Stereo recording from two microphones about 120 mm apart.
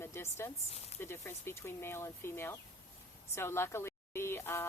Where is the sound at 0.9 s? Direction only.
20° left (ahead or behind).